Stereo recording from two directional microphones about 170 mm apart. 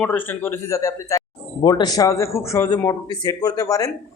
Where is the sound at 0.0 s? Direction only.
10° left (ahead or behind).